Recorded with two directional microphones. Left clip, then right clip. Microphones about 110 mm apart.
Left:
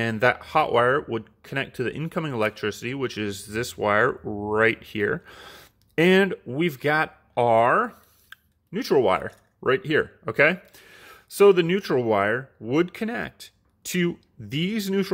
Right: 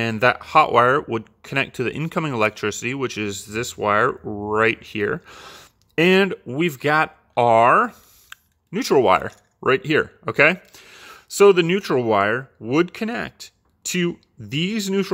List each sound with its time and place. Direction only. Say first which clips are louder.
0.0 s speech: right 3 dB; 15° right (ahead or behind)